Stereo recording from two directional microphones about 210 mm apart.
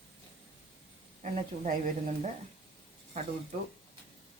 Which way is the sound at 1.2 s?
40° right (ahead or behind).